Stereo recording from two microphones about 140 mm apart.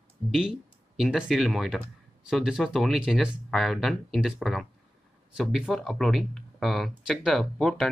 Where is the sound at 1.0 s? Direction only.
5° right (ahead or behind).